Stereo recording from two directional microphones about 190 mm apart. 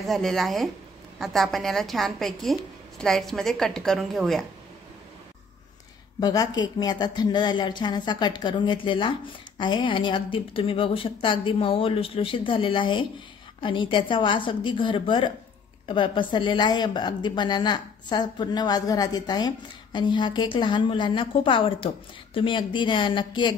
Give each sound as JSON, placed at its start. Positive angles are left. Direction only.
{"t": 0.0, "sound": "a woman's voice", "side_deg": 0}
{"t": 6.1, "sound": "a woman's voice", "side_deg": 20}